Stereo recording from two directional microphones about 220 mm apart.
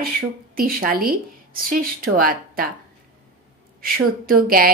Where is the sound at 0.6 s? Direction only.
40° right (ahead or behind).